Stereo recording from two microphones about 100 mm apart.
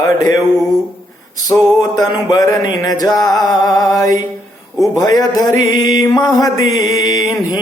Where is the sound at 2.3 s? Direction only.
35° left (ahead or behind).